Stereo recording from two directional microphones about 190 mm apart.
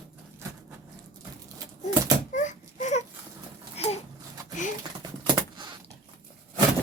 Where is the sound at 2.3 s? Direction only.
40° left (ahead or behind).